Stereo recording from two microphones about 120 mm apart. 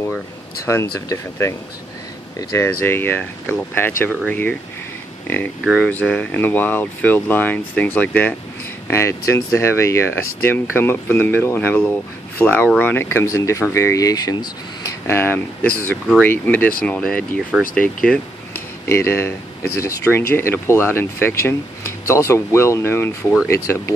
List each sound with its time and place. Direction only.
0.7 s speech: 25° left (ahead or behind)
5.9 s speech: 10° left (ahead or behind)
8.8 s speech: 25° left (ahead or behind); by 18.2 s 5° left (ahead or behind)
18.9 s speech: 20° left (ahead or behind)